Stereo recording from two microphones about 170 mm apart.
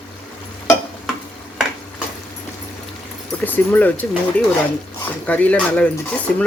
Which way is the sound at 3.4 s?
10° left (ahead or behind).